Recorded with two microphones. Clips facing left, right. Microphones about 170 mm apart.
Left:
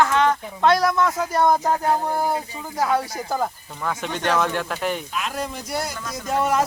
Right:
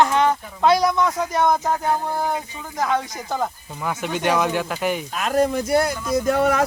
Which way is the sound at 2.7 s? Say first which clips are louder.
Left 1 dB; 10° left (ahead or behind).